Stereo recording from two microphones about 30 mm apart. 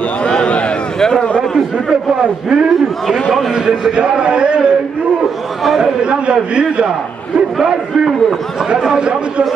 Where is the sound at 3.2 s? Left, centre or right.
Centre.